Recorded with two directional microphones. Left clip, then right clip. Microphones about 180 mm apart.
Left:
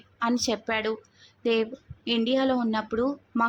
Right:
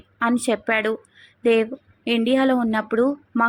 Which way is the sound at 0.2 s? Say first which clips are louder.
Right 5 dB; 20° right (ahead or behind).